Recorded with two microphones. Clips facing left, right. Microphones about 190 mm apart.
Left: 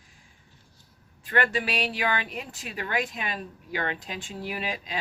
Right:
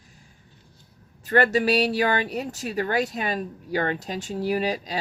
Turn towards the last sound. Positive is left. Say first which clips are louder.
# right 8 dB
turn(degrees=-40)  # may be behind; listen again after turning